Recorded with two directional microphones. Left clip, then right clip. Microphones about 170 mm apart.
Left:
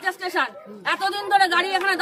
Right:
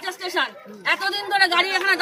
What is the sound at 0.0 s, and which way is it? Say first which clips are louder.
A woman's voice: left 1 dB; 20° left (ahead or behind).